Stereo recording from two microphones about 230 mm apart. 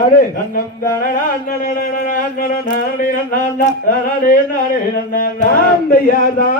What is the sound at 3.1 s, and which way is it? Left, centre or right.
Speech, left.